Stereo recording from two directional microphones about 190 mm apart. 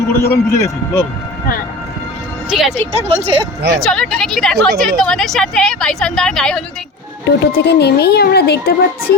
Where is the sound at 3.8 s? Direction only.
5° left (ahead or behind).